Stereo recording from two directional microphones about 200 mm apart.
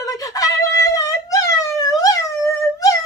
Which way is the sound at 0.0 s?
15° left (ahead or behind).